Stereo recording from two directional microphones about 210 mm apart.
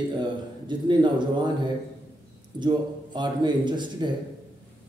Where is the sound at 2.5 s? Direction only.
20° right (ahead or behind).